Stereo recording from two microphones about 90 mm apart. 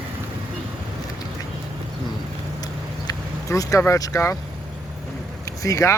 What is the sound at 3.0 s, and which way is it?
Vehicle, 40° left (ahead or behind).